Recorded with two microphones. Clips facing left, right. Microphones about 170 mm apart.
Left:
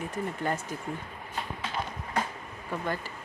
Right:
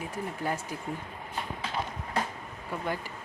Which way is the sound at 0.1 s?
10° right (ahead or behind).